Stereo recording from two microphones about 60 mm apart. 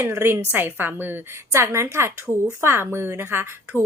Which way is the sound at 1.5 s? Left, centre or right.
Right.